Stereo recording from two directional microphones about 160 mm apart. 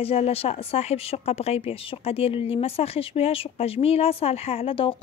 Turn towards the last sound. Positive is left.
turn(degrees=35)  # may be behind; listen again after turning